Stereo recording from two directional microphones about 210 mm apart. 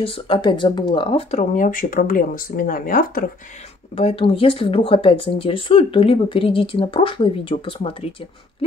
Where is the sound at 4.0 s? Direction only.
25° left (ahead or behind).